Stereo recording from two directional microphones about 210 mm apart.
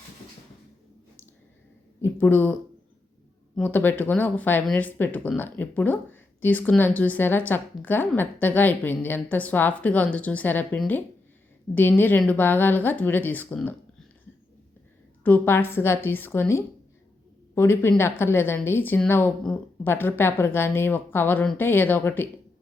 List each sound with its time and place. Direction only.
2.0 s speech: 10° left (ahead or behind)
15.2 s speech: 10° left (ahead or behind)